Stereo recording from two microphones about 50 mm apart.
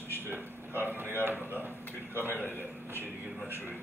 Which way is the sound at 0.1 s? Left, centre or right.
Right.